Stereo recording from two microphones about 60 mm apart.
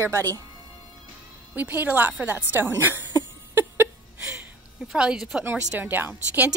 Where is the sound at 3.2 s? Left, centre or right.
Right.